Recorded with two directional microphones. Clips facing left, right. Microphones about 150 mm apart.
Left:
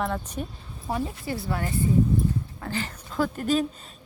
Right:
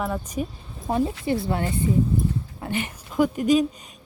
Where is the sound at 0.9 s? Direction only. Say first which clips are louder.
Right 6 dB; 20° right (ahead or behind).